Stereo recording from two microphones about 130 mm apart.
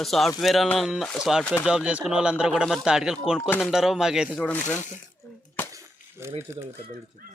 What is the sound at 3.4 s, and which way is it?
Speech, 15° left (ahead or behind).